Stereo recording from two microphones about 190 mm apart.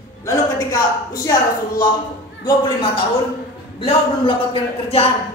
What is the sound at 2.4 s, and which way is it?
Speech, 25° left (ahead or behind).